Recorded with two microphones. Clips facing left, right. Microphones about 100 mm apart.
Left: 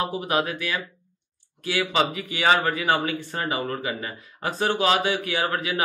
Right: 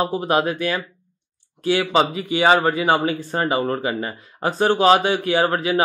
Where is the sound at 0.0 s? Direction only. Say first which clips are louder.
Right 5 dB; 35° right (ahead or behind).